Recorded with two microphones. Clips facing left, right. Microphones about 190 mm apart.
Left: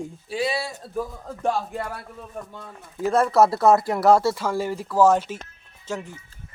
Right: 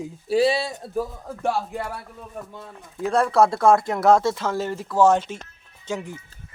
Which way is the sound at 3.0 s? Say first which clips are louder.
Left 1 dB; centre (ahead or behind).